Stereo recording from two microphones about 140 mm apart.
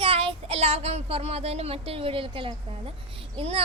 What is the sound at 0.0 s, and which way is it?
A child's voice, 40° right (ahead or behind).